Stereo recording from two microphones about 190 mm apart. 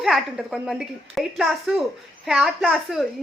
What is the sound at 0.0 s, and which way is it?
A woman's voice, centre (ahead or behind).